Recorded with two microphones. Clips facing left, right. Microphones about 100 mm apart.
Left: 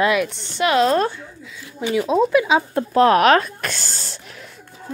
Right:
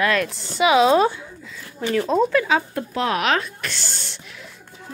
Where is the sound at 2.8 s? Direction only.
45° left (ahead or behind).